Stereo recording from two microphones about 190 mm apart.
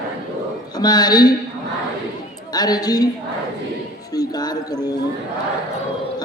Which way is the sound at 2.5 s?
20° left (ahead or behind).